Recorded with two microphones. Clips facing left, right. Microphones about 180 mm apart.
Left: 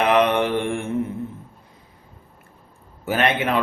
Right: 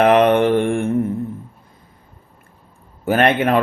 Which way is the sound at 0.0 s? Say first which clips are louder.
Right 5 dB; 50° right (ahead or behind).